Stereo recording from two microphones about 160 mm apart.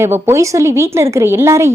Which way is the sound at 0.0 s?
15° right (ahead or behind).